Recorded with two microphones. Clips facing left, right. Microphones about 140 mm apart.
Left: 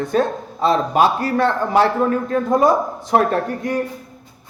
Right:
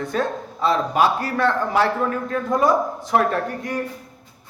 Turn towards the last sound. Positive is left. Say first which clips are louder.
# left 4 dB
turn(degrees=25)  # may be behind; listen again after turning